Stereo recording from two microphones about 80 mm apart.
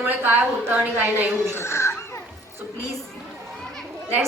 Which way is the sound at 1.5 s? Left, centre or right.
Left.